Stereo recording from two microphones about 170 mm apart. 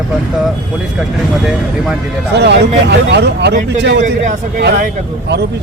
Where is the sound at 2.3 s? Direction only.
90° right.